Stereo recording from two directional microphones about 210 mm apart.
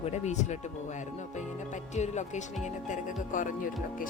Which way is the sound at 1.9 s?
35° left (ahead or behind).